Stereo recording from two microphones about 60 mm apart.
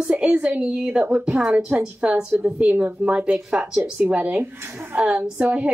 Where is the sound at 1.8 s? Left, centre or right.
Centre.